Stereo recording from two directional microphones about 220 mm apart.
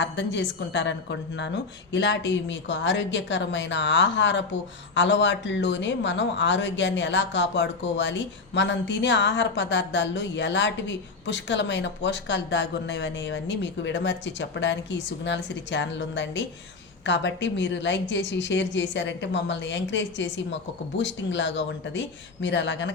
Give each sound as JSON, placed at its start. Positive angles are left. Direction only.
{"t": 0.0, "sound": "speech", "side_deg": 55}